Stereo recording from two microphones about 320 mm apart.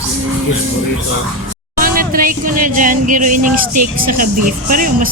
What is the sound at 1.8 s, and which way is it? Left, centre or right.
Speech, right.